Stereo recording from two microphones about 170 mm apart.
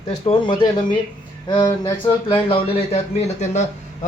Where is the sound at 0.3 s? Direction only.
30° left (ahead or behind).